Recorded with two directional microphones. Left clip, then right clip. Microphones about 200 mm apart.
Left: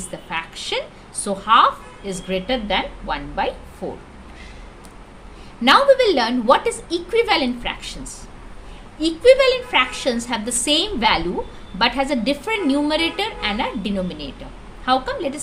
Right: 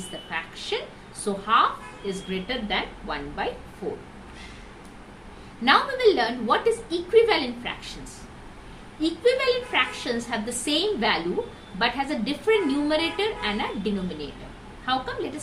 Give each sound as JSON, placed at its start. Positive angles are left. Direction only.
{"t": 0.3, "sound": "a sound", "side_deg": 60}
{"t": 1.2, "sound": "a woman's voice", "side_deg": 60}
{"t": 5.6, "sound": "a woman's voice", "side_deg": 60}
{"t": 9.0, "sound": "a woman's voice", "side_deg": 60}
{"t": 14.8, "sound": "a woman's voice", "side_deg": 60}